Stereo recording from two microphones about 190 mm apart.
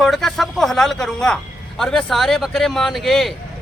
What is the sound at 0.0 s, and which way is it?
Speech, centre (ahead or behind).